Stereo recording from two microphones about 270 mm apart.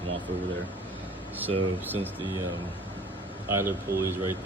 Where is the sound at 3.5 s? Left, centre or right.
Centre.